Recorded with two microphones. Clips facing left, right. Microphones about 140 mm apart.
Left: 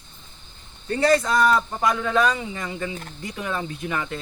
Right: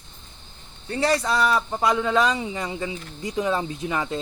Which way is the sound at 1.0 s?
10° right (ahead or behind).